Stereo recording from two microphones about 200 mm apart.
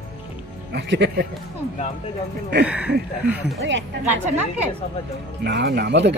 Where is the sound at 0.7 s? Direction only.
60° right (ahead or behind).